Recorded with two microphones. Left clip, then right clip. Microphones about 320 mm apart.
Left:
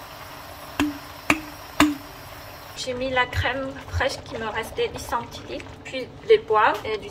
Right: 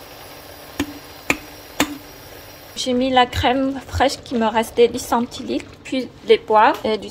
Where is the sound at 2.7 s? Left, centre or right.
Centre.